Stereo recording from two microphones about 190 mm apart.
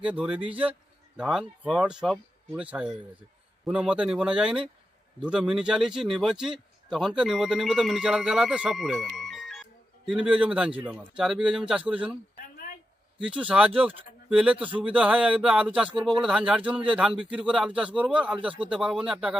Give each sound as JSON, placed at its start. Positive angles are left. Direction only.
{"t": 0.0, "sound": "speech", "side_deg": -5}
{"t": 13.1, "sound": "speech", "side_deg": -5}